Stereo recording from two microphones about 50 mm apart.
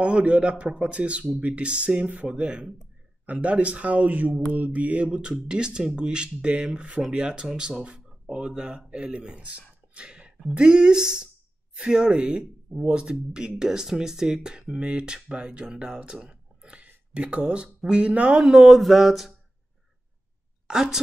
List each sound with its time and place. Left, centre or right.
0.0 s speech: right
9.9 s a sound: right
10.5 s speech: centre
18.8 s mantra: centre
20.6 s a woman's voice: centre